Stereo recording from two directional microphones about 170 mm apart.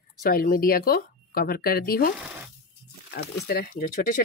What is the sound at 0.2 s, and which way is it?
Speech, 55° left (ahead or behind).